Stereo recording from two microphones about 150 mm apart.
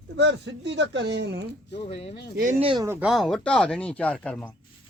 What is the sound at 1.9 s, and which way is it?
Speech, 40° left (ahead or behind).